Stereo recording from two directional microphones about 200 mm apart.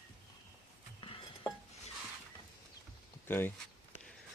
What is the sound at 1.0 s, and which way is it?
Dishes, 25° left (ahead or behind).